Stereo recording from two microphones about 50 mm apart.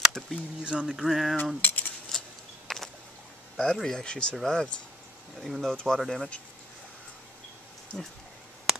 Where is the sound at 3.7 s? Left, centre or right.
Centre.